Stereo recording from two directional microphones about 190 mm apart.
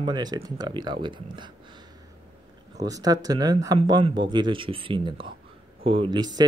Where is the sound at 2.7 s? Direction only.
20° right (ahead or behind).